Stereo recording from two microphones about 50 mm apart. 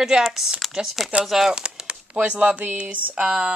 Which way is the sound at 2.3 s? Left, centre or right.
Right.